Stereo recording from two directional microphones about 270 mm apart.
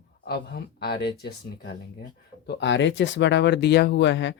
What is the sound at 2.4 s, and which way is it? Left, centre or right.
Speech, left.